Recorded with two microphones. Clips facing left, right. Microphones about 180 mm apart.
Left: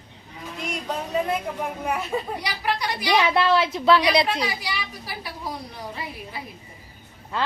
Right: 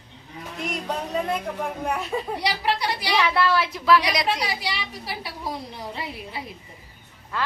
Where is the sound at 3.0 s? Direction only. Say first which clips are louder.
Left 3 dB; 20° left (ahead or behind).